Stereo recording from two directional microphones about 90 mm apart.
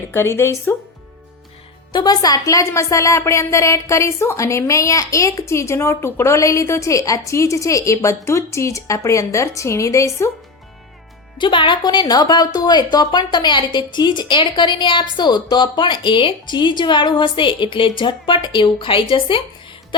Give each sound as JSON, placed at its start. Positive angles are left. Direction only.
{"t": 0.1, "sound": "speech", "side_deg": 30}
{"t": 1.9, "sound": "a woman's voice", "side_deg": 45}
{"t": 11.3, "sound": "speech", "side_deg": 60}